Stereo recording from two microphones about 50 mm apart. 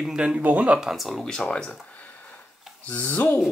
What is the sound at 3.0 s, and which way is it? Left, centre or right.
Speech, left.